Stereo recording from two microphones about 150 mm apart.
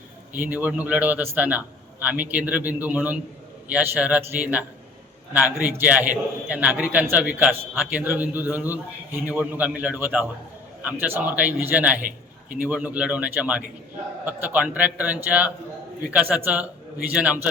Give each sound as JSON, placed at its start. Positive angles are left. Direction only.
{"t": 0.3, "sound": "a man's voice", "side_deg": -10}
{"t": 5.6, "sound": "a man's voice", "side_deg": -10}
{"t": 12.0, "sound": "a sound", "side_deg": -65}
{"t": 12.6, "sound": "a man's voice", "side_deg": -10}